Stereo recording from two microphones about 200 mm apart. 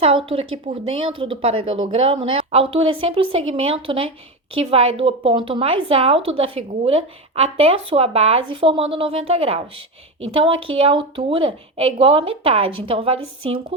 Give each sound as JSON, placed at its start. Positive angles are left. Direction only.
{"t": 0.3, "sound": "speech", "side_deg": -30}